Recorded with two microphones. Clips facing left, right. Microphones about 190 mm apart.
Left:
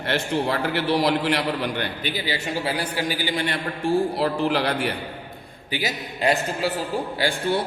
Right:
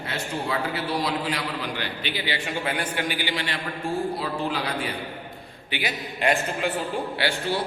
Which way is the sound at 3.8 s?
85° left.